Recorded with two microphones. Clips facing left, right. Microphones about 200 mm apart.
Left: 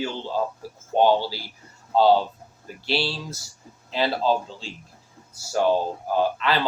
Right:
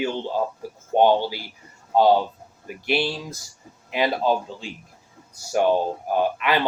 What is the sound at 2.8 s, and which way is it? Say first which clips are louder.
Speech: right 2 dB; 15° right (ahead or behind).